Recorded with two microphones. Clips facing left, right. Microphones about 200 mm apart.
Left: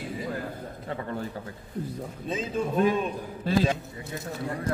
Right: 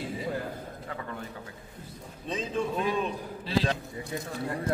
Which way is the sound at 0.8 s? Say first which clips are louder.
Left 7 dB; 35° left (ahead or behind).